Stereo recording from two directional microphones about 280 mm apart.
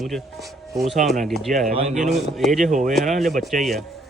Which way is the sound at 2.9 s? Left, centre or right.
Centre.